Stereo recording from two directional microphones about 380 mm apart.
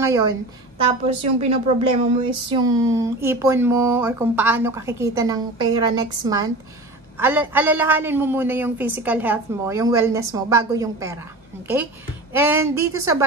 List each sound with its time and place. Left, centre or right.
0.0 s a man's voice: centre